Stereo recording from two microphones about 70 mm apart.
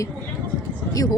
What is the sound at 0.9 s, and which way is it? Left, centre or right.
Speech, left.